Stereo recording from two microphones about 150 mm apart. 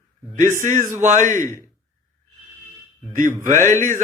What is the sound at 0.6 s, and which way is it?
Speech, 60° right (ahead or behind).